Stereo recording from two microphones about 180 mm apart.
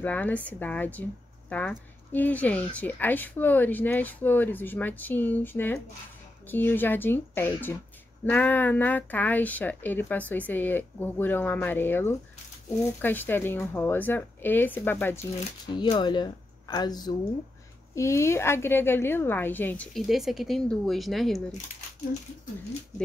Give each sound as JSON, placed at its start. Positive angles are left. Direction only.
{"t": 0.0, "sound": "a woman's voice", "side_deg": 10}
{"t": 15.6, "sound": "a woman's voice", "side_deg": 25}